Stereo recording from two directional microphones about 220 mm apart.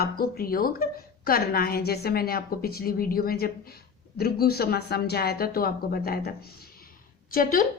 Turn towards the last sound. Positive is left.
turn(degrees=40)  # may be behind; listen again after turning